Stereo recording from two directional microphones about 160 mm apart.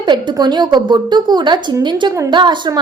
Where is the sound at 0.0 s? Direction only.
25° right (ahead or behind).